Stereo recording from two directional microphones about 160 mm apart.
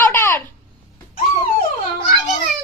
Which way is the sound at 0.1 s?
15° left (ahead or behind).